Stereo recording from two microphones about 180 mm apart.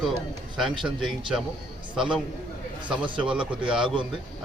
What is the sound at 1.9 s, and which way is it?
A man's voice, 5° right (ahead or behind).